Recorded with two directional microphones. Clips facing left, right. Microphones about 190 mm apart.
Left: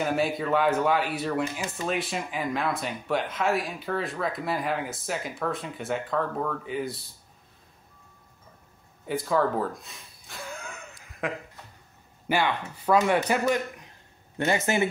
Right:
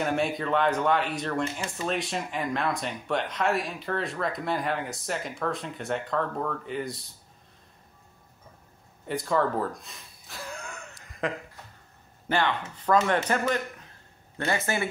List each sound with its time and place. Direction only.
0.0 s speech: centre (ahead or behind)
9.0 s gasp: centre (ahead or behind)
12.3 s speech: 10° left (ahead or behind)